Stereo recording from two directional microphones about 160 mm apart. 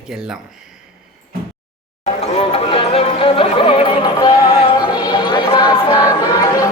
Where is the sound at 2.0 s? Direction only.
40° left (ahead or behind); by 6.7 s 25° left (ahead or behind).